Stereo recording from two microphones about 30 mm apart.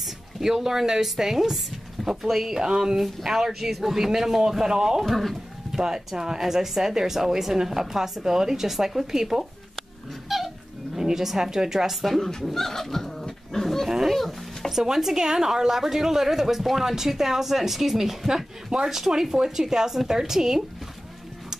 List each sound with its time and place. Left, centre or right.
0.4 s speech: centre
2.6 s speech: right
3.0 s speech: centre
5.0 s speech: centre
5.8 s speech: right
9.8 s a sound: centre
11.0 s speech: centre
11.9 s speech: centre
12.2 s speech: centre
12.5 s dog: centre
13.8 s dog: centre
14.1 s music: centre
14.7 s speech: centre